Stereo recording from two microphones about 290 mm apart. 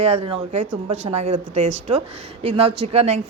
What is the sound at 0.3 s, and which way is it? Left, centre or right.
Speech, right.